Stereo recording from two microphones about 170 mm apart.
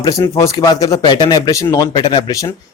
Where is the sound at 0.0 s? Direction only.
20° left (ahead or behind).